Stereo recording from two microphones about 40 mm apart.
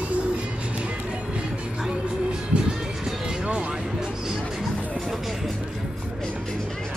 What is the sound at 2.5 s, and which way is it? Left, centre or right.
Music, right.